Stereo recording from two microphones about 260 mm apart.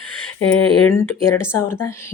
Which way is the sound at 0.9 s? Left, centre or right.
Centre.